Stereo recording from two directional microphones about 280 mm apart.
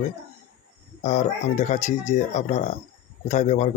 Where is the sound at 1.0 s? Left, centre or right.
Left.